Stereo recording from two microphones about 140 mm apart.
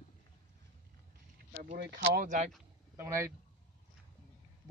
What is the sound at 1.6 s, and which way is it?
Speech, 70° right (ahead or behind).